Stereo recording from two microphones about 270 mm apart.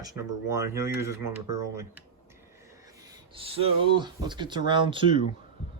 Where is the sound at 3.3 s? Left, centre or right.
Right.